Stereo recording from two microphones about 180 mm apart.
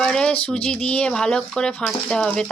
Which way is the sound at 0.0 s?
5° left (ahead or behind).